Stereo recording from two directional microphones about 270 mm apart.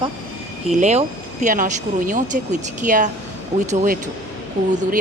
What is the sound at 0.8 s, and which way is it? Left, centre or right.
Speech, right.